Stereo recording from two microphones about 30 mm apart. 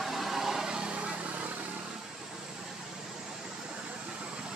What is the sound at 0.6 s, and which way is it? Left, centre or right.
Vehicle, right.